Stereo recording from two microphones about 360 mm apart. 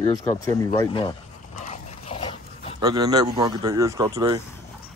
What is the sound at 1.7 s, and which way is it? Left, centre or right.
Dog, centre.